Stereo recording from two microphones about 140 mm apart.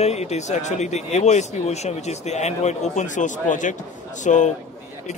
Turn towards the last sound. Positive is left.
turn(degrees=60)  # may be behind; listen again after turning